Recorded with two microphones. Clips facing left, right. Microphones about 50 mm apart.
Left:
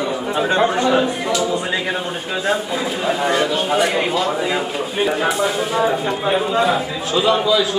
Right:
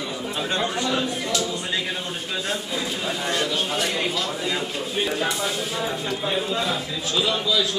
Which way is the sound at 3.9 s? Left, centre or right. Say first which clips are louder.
Left 7 dB; centre.